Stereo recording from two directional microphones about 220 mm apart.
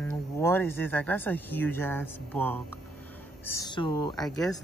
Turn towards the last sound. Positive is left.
turn(degrees=0)  # may be behind; listen again after turning